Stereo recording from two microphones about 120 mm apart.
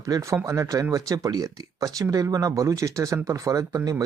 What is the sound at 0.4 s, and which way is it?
Speech, 25° right (ahead or behind).